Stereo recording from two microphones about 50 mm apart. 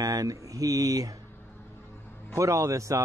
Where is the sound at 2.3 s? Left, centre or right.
Right.